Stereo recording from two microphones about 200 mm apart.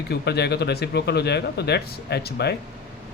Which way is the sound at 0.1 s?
55° left (ahead or behind).